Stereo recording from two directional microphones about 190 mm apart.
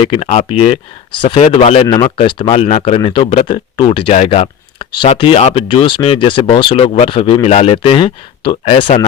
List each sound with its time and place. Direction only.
0.0 s speech: 35° left (ahead or behind)